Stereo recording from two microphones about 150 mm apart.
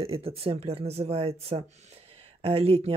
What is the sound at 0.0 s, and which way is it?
Speech, 40° right (ahead or behind).